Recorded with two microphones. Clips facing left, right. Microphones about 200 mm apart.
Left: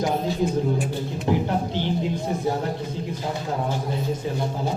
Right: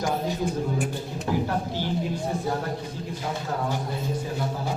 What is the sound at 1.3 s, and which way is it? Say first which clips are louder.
Speech: left 3 dB; 20° left (ahead or behind).